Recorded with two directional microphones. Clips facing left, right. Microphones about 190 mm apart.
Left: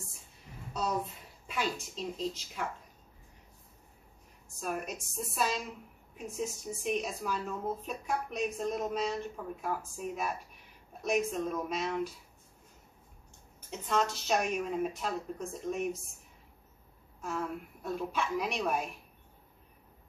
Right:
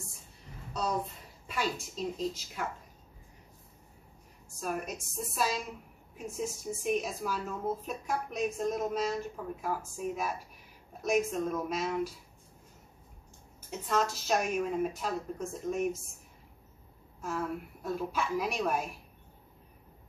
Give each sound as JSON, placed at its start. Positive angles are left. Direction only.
{"t": 1.5, "sound": "speech", "side_deg": 0}
{"t": 4.6, "sound": "speech", "side_deg": 0}
{"t": 13.7, "sound": "speech", "side_deg": -5}
{"t": 17.2, "sound": "speech", "side_deg": 0}